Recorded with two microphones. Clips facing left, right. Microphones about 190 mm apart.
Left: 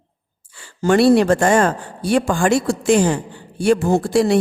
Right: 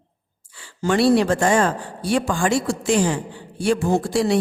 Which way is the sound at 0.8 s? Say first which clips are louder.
Left 4 dB; 50° left (ahead or behind).